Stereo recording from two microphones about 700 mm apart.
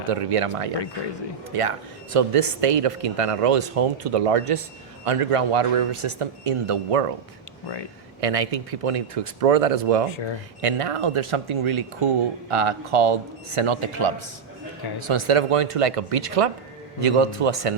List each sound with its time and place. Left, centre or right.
0.1 s speech: right
2.1 s speech: right
8.2 s speech: right
15.0 s speech: right